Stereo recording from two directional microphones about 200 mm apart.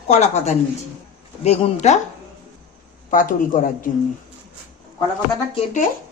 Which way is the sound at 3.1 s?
45° left (ahead or behind).